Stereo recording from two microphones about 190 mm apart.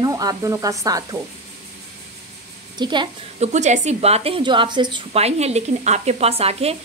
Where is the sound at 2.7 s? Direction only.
25° right (ahead or behind).